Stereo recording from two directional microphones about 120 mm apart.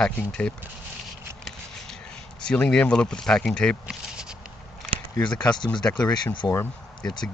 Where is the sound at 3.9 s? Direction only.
5° right (ahead or behind).